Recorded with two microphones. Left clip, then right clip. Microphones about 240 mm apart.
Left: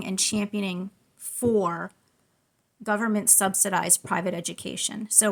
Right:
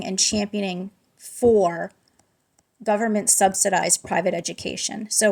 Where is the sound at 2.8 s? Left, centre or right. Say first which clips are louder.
Right 4 dB; centre.